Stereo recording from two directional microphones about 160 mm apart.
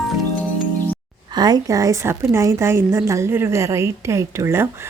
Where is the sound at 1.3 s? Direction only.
25° right (ahead or behind).